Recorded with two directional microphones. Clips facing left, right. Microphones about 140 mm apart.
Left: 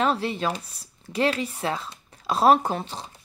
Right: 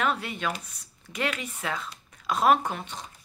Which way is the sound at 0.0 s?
30° left (ahead or behind).